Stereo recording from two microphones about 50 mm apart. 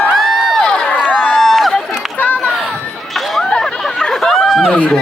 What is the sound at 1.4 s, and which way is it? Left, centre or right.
Crowd, centre.